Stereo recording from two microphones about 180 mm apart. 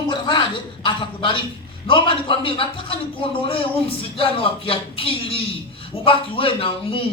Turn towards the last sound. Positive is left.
turn(degrees=30)  # may be behind; listen again after turning